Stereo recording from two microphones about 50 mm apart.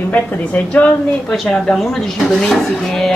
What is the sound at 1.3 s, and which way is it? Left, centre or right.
Speech, centre.